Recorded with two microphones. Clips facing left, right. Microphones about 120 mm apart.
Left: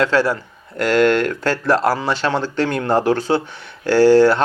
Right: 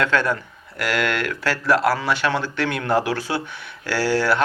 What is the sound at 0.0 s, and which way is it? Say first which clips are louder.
Speech: left 4 dB; 30° left (ahead or behind).